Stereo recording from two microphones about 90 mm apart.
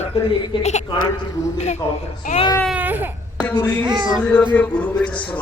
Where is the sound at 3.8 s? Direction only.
55° right (ahead or behind).